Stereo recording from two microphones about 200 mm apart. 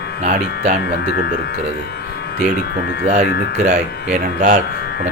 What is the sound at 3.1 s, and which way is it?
Speech, 35° right (ahead or behind).